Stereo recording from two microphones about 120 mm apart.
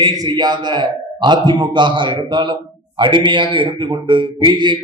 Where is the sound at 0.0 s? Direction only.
35° right (ahead or behind).